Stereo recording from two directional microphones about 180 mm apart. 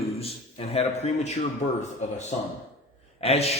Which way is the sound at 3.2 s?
35° left (ahead or behind).